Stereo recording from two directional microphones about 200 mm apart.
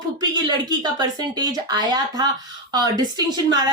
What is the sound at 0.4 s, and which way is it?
Speech, 20° right (ahead or behind).